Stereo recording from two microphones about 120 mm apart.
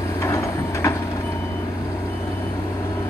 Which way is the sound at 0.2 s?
25° left (ahead or behind).